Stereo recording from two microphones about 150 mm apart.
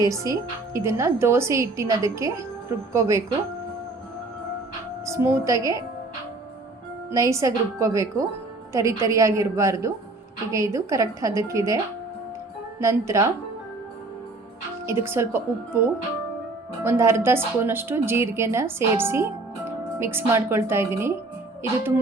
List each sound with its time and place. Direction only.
0.0 s a woman's voice: 20° right (ahead or behind)
5.0 s a woman's voice: 20° right (ahead or behind)
7.1 s a woman's voice: 20° right (ahead or behind)
12.8 s a woman's voice: 20° right (ahead or behind)
14.8 s a woman's voice: 15° right (ahead or behind)
16.8 s a woman's voice: 20° right (ahead or behind)